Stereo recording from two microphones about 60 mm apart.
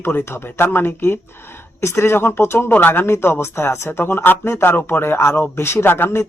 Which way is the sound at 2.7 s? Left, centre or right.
Left.